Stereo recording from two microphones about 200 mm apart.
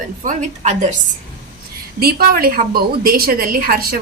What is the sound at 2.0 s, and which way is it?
A woman's voice, 50° right (ahead or behind).